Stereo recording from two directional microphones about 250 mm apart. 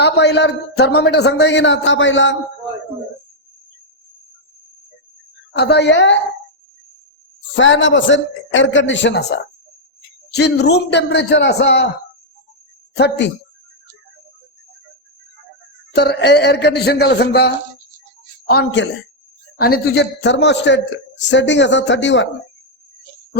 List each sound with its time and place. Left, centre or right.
0.0 s a man's voice: left
5.5 s a man's voice: left
7.5 s a man's voice: left
13.0 s a man's voice: left
16.0 s speech: left
18.5 s a man's voice: left